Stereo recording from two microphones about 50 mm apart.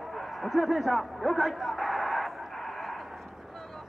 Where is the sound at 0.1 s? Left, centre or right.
Centre.